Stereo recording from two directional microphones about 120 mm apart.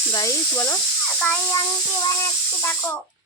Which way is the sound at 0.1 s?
25° left (ahead or behind).